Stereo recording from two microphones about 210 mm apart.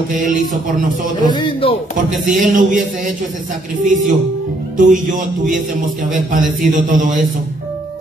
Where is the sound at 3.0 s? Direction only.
40° right (ahead or behind).